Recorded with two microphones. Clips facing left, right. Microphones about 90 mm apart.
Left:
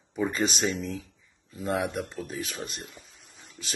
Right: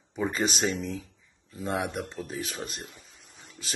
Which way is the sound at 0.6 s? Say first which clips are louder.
Even; 30° right (ahead or behind).